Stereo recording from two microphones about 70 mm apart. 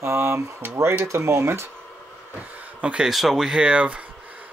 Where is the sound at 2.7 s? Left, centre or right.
Centre.